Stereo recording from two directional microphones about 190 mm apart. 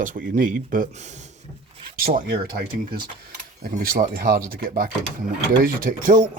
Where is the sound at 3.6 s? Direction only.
50° right (ahead or behind).